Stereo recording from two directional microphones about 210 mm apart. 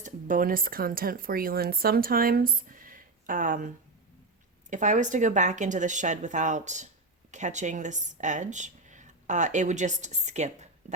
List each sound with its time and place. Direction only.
0.0 s speech: 40° right (ahead or behind)
4.7 s a woman's voice: 35° right (ahead or behind)